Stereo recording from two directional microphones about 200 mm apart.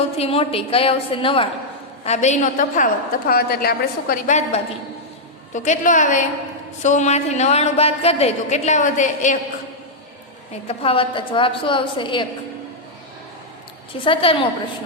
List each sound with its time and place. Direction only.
0.2 s a woman's voice: 30° left (ahead or behind)
10.7 s a woman's voice: 25° left (ahead or behind)
14.0 s a woman's voice: 25° left (ahead or behind)